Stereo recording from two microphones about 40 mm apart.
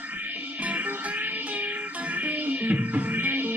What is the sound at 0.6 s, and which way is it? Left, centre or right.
Music, right.